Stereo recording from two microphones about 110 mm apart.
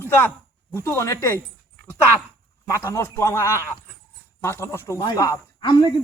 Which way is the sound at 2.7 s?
25° left (ahead or behind).